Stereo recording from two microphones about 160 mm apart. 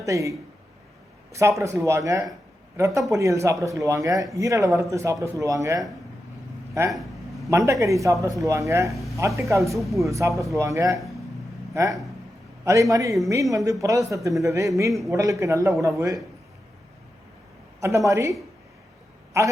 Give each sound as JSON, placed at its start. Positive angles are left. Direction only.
{"t": 0.0, "sound": "speech", "side_deg": -20}
{"t": 6.9, "sound": "a sound", "side_deg": 0}
{"t": 7.5, "sound": "speech", "side_deg": -20}
{"t": 8.9, "sound": "speech", "side_deg": 0}
{"t": 9.1, "sound": "speech", "side_deg": -20}
{"t": 9.7, "sound": "speech", "side_deg": 0}
{"t": 10.1, "sound": "speech", "side_deg": -20}
{"t": 17.7, "sound": "speech", "side_deg": -20}
{"t": 19.3, "sound": "speech", "side_deg": -20}